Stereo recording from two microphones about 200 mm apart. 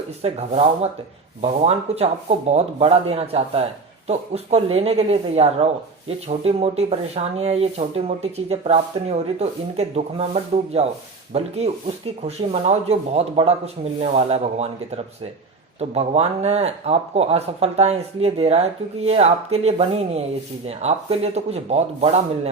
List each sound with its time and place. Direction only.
0.2 s speech: 30° right (ahead or behind)